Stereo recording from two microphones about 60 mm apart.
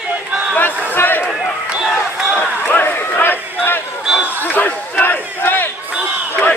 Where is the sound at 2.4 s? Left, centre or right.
Left.